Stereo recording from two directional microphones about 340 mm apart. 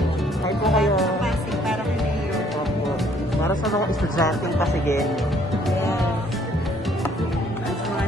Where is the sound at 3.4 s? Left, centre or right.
Centre.